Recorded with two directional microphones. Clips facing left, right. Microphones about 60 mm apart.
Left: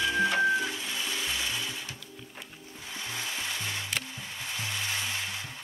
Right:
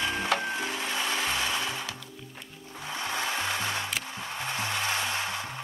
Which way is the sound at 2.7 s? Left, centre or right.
Right.